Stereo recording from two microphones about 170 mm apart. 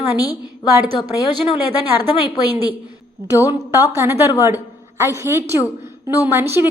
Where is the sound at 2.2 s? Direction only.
20° left (ahead or behind).